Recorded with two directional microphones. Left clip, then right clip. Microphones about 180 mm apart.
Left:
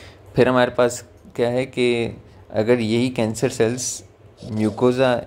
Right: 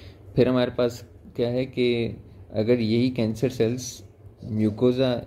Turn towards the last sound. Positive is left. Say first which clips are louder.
# left 5 dB
turn(degrees=15)  # may be behind; listen again after turning